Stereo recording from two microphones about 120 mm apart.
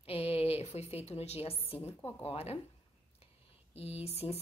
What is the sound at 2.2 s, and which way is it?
Speech, 55° left (ahead or behind).